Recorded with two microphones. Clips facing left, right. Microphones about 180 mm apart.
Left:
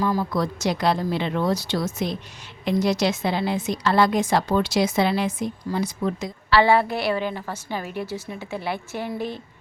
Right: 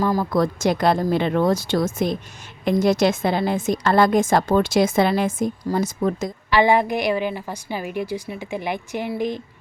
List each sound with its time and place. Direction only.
0.0 s a woman's voice: 45° right (ahead or behind)
6.5 s a woman's voice: 15° right (ahead or behind)